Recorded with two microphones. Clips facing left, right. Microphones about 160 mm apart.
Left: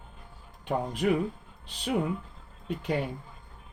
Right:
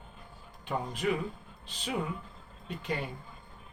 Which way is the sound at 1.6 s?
60° left (ahead or behind).